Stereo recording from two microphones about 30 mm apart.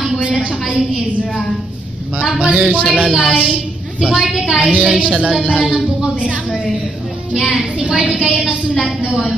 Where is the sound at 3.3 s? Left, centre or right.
Right.